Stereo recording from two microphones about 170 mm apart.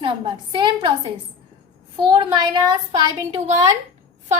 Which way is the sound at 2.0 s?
25° right (ahead or behind).